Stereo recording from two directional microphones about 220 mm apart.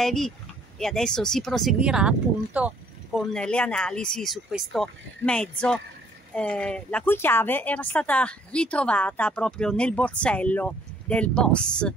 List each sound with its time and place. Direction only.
0.0 s a woman's voice: centre (ahead or behind)